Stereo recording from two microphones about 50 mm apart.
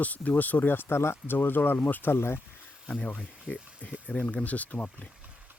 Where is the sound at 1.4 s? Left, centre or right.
Left.